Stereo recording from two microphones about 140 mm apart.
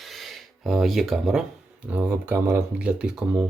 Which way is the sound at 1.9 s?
15° right (ahead or behind).